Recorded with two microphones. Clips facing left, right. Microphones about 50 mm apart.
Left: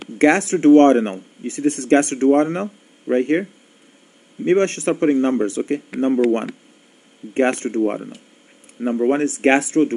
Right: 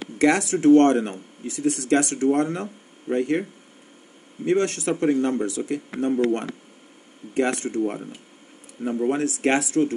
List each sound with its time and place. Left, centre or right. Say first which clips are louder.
0.2 s speech: left 4 dB; left
4.5 s speech: left 5 dB; left
7.3 s speech: left 5 dB; left